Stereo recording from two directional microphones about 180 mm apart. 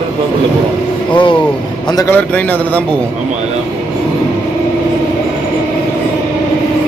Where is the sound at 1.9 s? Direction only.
15° left (ahead or behind).